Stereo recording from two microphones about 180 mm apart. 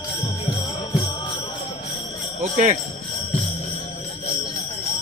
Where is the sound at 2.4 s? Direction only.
45° right (ahead or behind).